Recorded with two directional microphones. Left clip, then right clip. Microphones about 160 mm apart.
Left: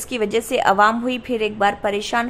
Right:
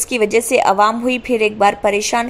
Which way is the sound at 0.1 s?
20° right (ahead or behind).